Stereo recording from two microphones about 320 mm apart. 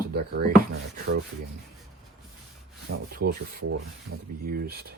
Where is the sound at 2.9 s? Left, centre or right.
Right.